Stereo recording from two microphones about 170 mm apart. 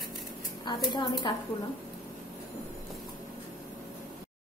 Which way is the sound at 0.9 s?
25° left (ahead or behind).